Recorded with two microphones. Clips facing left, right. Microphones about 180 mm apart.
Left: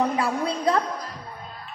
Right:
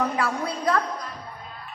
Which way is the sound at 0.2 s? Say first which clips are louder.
Left 2 dB; 25° left (ahead or behind).